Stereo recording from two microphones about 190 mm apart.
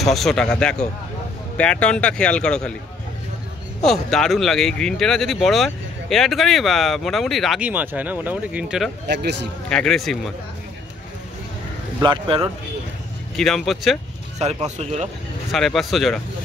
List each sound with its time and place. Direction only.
0.0 s speech: centre (ahead or behind)
3.8 s speech: centre (ahead or behind)
9.0 s speech: 65° right (ahead or behind)
9.7 s speech: 5° left (ahead or behind)
12.0 s speech: 25° right (ahead or behind)
13.4 s speech: centre (ahead or behind)
14.4 s speech: 35° right (ahead or behind)
15.5 s speech: centre (ahead or behind)